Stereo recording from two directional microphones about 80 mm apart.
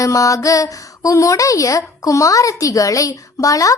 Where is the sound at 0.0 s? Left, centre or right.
Left.